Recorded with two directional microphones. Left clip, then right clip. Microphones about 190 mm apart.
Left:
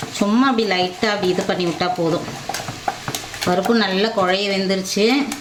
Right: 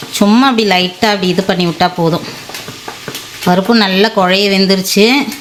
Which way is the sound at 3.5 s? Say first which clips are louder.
Right 7 dB; 45° right (ahead or behind).